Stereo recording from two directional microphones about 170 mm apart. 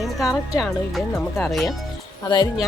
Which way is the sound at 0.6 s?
Centre (ahead or behind).